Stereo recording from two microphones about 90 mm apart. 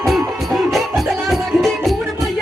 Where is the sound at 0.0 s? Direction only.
Centre (ahead or behind).